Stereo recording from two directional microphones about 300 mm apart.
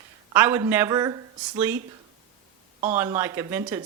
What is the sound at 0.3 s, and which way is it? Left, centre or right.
Speech, centre.